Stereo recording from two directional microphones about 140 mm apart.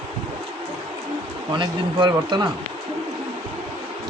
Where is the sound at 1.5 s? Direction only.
35° right (ahead or behind).